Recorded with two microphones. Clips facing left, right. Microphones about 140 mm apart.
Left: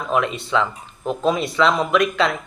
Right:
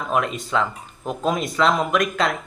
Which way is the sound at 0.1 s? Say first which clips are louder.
Left 2 dB; 45° right (ahead or behind).